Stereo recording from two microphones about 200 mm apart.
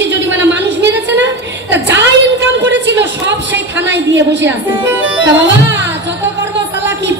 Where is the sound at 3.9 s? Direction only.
65° right (ahead or behind).